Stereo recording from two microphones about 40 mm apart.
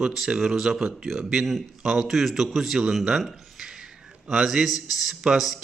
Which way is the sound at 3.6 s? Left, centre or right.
Centre.